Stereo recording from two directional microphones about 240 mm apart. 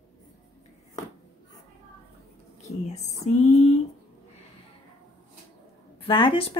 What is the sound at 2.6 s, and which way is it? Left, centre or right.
Speech, left.